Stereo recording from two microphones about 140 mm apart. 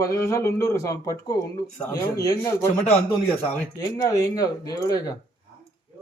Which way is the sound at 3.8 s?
25° left (ahead or behind).